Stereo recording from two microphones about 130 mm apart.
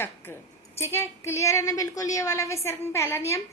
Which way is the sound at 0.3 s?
20° left (ahead or behind).